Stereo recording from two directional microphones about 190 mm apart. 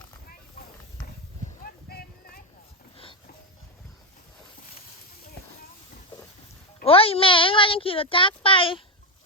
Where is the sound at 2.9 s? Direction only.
30° left (ahead or behind).